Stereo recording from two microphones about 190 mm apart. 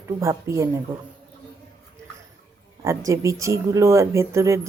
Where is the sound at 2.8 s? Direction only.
15° right (ahead or behind).